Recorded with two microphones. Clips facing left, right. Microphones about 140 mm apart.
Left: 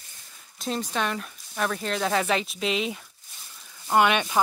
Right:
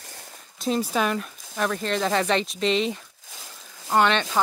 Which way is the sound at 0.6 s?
5° right (ahead or behind).